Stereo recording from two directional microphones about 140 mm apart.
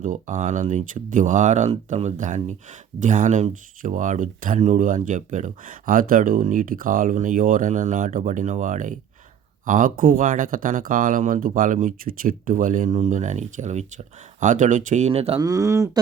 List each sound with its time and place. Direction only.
0.0 s speech: 65° right (ahead or behind); by 15.4 s 45° right (ahead or behind)
15.4 s speech: 25° right (ahead or behind)